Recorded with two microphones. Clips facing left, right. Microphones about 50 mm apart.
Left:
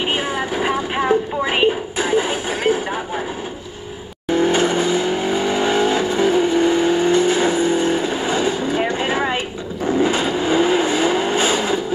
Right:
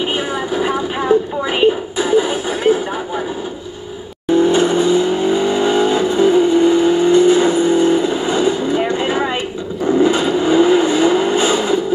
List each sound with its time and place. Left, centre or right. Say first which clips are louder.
0.1 s vehicle: right 2 dB; left
4.3 s vehicle: right 4 dB; left
8.7 s a sound: right 3 dB; left
10.0 s vehicle: right 4 dB; left